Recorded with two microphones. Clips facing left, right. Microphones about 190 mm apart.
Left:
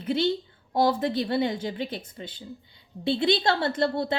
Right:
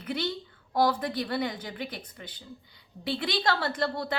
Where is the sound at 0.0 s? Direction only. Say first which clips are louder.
Left 7 dB; 25° left (ahead or behind).